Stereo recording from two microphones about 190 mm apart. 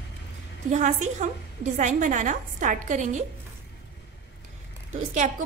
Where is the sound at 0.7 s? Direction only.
40° right (ahead or behind).